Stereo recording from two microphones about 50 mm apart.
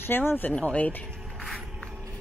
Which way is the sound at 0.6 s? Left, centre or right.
Left.